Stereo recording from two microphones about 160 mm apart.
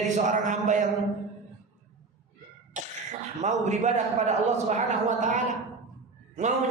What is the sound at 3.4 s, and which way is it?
A man's voice, 45° right (ahead or behind).